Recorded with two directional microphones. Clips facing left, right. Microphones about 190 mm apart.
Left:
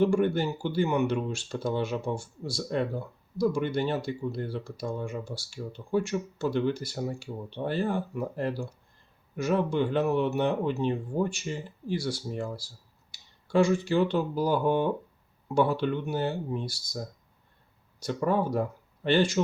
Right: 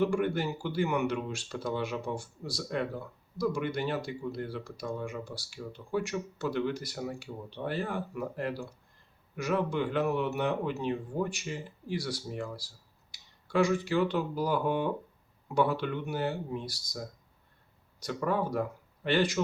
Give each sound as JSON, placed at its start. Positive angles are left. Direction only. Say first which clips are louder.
{"t": 0.0, "sound": "speech", "louder": "left 4 dB", "side_deg": 30}
{"t": 18.0, "sound": "speech", "louder": "left 4 dB", "side_deg": 25}